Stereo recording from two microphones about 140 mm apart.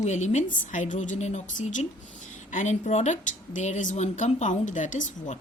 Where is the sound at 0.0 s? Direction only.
55° left (ahead or behind).